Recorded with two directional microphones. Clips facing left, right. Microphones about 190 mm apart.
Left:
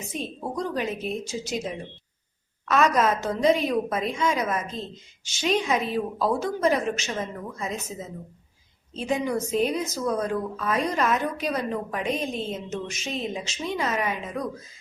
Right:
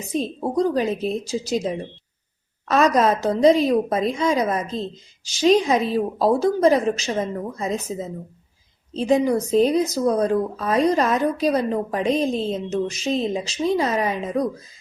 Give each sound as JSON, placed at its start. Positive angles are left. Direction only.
{"t": 0.1, "sound": "speech", "side_deg": -35}